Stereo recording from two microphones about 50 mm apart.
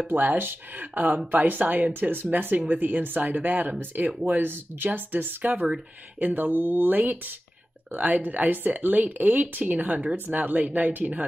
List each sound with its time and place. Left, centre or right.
0.1 s speech: right